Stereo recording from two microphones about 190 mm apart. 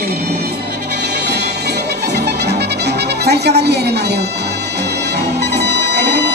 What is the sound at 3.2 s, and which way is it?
Speech, 60° right (ahead or behind).